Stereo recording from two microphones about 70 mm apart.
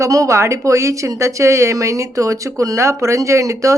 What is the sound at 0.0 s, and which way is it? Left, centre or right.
Speech, right.